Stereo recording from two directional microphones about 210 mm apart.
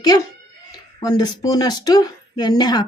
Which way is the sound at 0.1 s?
20° left (ahead or behind).